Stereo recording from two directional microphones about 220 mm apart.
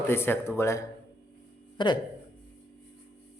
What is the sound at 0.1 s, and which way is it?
Speech, 10° left (ahead or behind).